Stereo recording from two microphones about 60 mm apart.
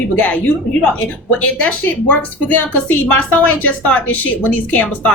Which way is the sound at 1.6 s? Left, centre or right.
Left.